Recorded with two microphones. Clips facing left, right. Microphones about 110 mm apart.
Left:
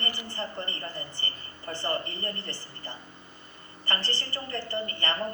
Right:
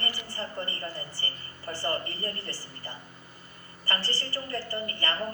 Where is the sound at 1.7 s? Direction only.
20° left (ahead or behind).